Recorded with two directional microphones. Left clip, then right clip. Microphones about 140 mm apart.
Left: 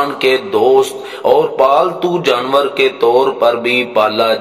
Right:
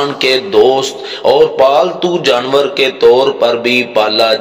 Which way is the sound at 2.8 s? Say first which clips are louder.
Right 5 dB; 10° right (ahead or behind).